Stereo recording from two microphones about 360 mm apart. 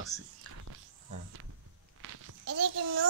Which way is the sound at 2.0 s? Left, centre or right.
Right.